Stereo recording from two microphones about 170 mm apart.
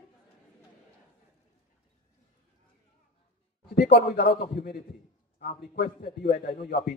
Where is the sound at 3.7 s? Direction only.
80° left.